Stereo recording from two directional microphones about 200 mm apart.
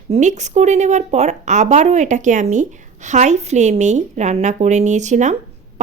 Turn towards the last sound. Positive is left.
turn(degrees=-35)  # may be behind; listen again after turning